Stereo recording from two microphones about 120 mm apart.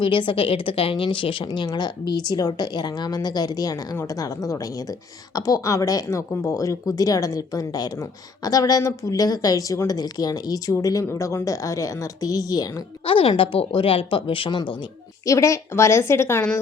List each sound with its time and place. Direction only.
0.0 s a woman's voice: 45° left (ahead or behind); by 12.8 s 30° left (ahead or behind)
13.1 s speech: 50° left (ahead or behind)
15.3 s a woman's voice: 25° left (ahead or behind)